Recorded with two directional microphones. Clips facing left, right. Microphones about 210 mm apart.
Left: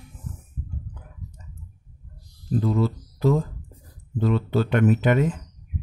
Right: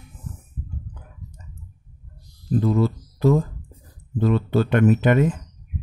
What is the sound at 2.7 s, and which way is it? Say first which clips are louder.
Speech: right 3 dB; 50° right (ahead or behind).